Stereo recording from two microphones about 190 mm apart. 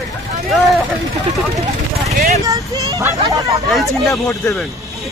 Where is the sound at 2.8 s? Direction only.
15° right (ahead or behind).